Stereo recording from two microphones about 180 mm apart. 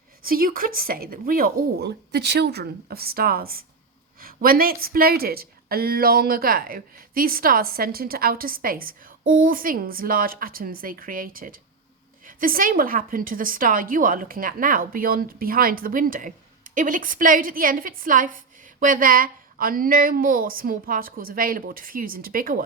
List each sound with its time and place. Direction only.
0.3 s a woman's voice: 50° right (ahead or behind)